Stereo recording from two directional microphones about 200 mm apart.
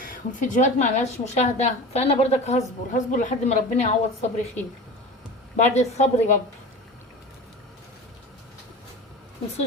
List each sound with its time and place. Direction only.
0.0 s a woman's voice: 40° left (ahead or behind)
5.5 s a woman's voice: 35° left (ahead or behind)